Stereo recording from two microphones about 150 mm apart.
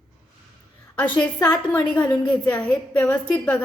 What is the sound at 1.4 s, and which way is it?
A woman's voice, 10° left (ahead or behind).